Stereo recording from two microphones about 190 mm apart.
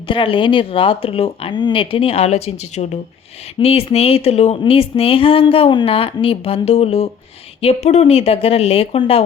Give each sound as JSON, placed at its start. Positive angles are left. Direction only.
{"t": 0.1, "sound": "speech", "side_deg": 25}